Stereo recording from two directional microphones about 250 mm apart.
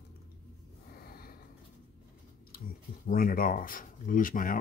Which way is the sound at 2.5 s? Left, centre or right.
Left.